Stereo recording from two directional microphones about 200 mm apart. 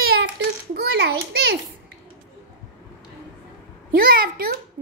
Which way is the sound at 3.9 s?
45° right (ahead or behind).